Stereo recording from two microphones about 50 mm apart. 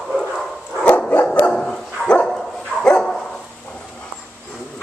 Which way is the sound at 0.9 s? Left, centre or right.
Left.